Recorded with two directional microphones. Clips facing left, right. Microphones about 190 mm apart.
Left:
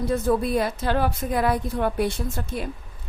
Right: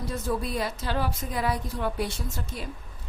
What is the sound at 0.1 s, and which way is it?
Speech, 55° left (ahead or behind).